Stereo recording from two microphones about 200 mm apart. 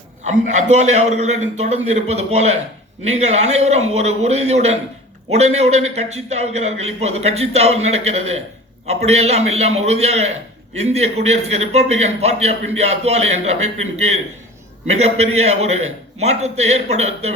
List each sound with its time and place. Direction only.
0.3 s a man's voice: 35° right (ahead or behind)